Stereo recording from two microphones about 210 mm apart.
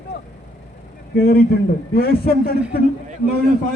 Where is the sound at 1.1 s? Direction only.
45° left (ahead or behind).